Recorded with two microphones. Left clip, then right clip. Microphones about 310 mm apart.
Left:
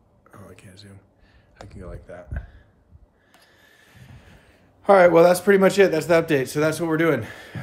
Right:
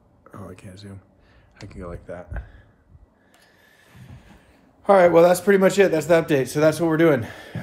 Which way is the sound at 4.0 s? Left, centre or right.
Centre.